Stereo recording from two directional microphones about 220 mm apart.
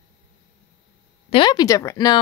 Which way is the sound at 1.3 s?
20° left (ahead or behind).